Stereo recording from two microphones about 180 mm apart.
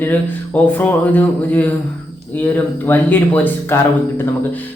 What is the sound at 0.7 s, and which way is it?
Speech, 10° left (ahead or behind).